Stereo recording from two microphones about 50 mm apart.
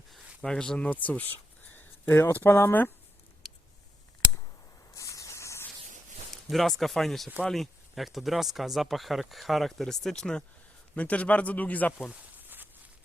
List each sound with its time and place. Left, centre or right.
0.4 s speech: centre
0.8 s speech: left
4.9 s a sound: left
6.3 s speech: centre
10.9 s speech: left